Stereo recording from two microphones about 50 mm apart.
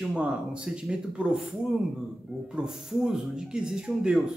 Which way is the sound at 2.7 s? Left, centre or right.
Centre.